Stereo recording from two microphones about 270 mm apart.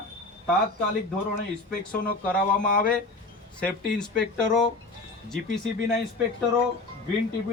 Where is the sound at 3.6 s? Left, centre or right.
Centre.